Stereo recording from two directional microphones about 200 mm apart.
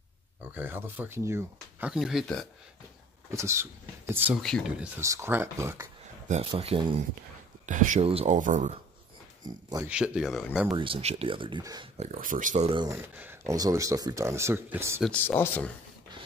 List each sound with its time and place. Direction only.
0.6 s speech: 10° right (ahead or behind)
3.3 s speech: 15° right (ahead or behind)
4.4 s speech: centre (ahead or behind)
5.0 s speech: 15° right (ahead or behind)
6.2 s speech: 30° right (ahead or behind)
7.6 s speech: 40° right (ahead or behind)
9.4 s speech: 20° right (ahead or behind)
9.8 s speech: 5° right (ahead or behind)
10.7 s speech: 25° right (ahead or behind)
12.0 s speech: 40° right (ahead or behind)
12.7 s speech: 20° right (ahead or behind)
15.0 s speech: 10° left (ahead or behind)